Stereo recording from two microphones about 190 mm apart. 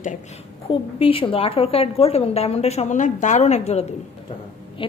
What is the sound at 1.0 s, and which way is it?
A woman's voice, 30° left (ahead or behind).